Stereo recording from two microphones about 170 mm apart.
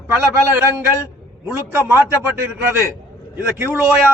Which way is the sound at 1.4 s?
10° right (ahead or behind).